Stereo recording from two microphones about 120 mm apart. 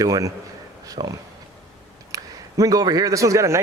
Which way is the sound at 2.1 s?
30° right (ahead or behind).